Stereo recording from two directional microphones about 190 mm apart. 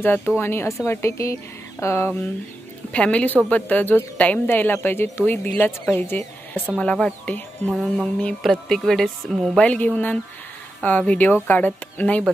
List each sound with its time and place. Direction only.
0.0 s speech: 10° left (ahead or behind)